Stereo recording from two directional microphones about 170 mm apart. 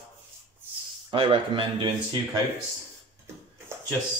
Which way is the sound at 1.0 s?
30° right (ahead or behind).